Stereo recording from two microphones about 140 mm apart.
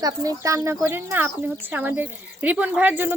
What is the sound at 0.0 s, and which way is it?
Speech, 25° right (ahead or behind).